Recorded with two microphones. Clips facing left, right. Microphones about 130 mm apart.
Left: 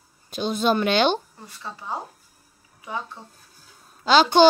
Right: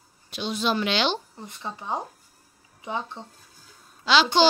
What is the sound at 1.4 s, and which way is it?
Speech, 20° right (ahead or behind).